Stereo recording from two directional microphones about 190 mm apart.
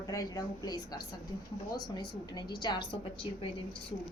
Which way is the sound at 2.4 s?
20° left (ahead or behind).